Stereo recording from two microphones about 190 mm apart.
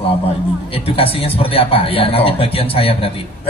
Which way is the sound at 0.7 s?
30° left (ahead or behind).